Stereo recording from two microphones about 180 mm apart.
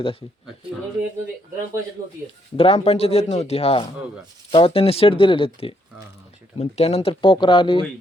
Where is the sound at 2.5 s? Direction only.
35° left (ahead or behind).